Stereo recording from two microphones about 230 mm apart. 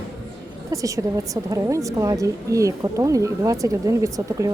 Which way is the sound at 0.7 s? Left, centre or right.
Centre.